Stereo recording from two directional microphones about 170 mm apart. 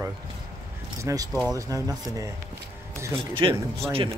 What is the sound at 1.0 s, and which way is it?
Speech, 20° right (ahead or behind).